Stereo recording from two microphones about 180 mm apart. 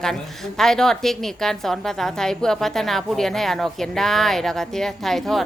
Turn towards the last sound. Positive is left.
turn(degrees=0)  # may be behind; listen again after turning